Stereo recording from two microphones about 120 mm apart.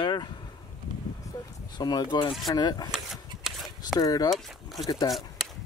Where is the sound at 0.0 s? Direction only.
40° left (ahead or behind).